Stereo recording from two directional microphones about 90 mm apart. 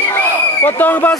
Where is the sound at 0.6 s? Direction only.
20° left (ahead or behind).